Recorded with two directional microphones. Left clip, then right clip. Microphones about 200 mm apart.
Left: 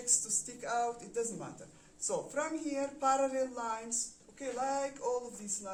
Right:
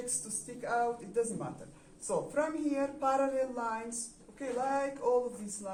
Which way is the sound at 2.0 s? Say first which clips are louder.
Right 3 dB; 45° left (ahead or behind).